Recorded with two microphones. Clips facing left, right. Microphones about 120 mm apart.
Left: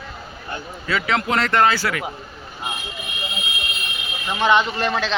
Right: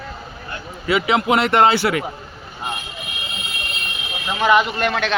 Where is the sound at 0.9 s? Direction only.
15° right (ahead or behind).